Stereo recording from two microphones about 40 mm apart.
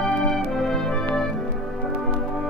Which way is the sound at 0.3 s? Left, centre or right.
Centre.